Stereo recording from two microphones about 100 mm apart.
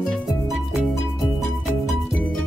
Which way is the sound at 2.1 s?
5° left (ahead or behind).